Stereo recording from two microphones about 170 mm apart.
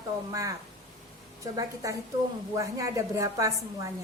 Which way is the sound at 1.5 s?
20° right (ahead or behind).